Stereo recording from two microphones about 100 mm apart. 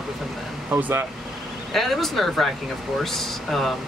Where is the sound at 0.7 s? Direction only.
25° right (ahead or behind).